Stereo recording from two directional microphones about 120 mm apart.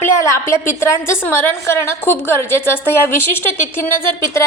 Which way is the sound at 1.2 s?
20° left (ahead or behind).